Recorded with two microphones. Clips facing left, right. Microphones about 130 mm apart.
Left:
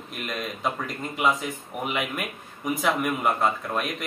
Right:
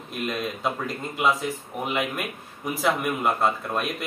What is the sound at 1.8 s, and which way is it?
Speech, centre (ahead or behind).